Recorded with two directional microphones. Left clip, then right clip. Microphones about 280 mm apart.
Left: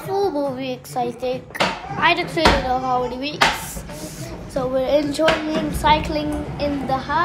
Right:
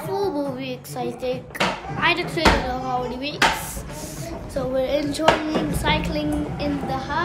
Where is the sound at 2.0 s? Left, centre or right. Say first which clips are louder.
Left 4 dB; centre.